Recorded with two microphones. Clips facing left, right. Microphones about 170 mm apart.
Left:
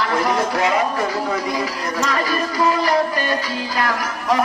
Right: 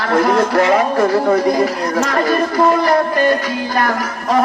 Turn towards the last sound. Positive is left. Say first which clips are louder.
# right 3 dB
turn(degrees=-55)  # may be behind; listen again after turning